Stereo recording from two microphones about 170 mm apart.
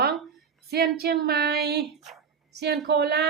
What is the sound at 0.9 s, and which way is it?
Speech, 65° right (ahead or behind).